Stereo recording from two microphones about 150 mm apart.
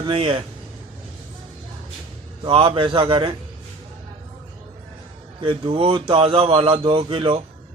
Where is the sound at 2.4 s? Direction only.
35° right (ahead or behind).